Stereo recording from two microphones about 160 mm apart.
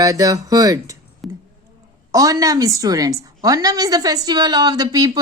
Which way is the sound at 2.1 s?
20° right (ahead or behind).